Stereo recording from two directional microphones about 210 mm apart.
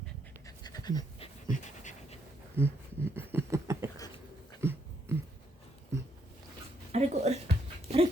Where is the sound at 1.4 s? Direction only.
35° left (ahead or behind).